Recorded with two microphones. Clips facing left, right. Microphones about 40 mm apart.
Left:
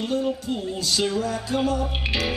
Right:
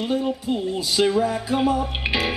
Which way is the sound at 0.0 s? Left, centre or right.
Centre.